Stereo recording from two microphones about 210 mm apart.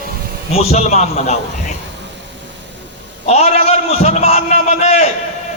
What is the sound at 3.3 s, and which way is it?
A man's voice, 30° left (ahead or behind).